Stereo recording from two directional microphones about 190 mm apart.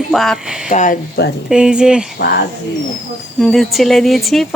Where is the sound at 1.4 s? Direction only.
5° right (ahead or behind).